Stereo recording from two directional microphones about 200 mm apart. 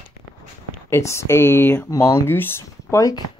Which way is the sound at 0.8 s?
15° left (ahead or behind).